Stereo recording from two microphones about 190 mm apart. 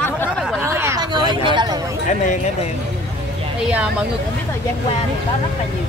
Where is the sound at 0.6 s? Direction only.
15° right (ahead or behind).